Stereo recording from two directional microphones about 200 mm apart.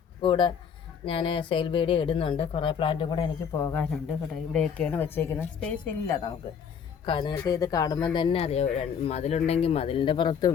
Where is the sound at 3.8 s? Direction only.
5° left (ahead or behind).